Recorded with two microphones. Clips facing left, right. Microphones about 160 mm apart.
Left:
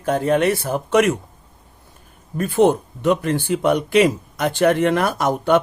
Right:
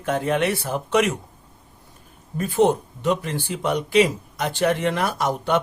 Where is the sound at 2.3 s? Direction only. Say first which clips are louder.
Left 3 dB; 60° left (ahead or behind).